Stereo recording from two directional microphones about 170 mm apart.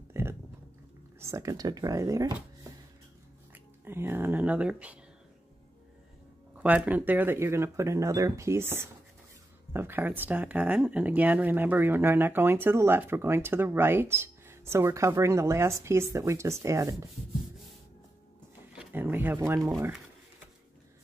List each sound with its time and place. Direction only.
0.1 s a sound: 15° right (ahead or behind)
1.2 s speech: 20° right (ahead or behind)
3.5 s speech: 15° right (ahead or behind)
6.5 s speech: 5° right (ahead or behind)
18.8 s speech: 10° right (ahead or behind)
19.7 s speech: 5° right (ahead or behind)